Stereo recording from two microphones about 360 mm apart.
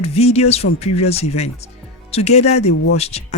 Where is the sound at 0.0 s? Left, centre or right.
Centre.